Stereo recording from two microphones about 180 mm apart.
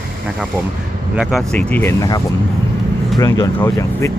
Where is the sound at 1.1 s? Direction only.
5° right (ahead or behind).